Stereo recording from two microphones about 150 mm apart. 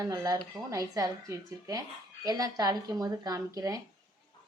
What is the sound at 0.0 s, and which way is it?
Speech, 25° right (ahead or behind).